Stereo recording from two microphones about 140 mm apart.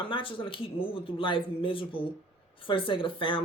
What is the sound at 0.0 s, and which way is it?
Speech, 40° left (ahead or behind).